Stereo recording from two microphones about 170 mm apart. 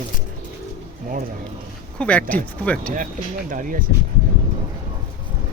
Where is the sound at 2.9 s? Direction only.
50° right (ahead or behind).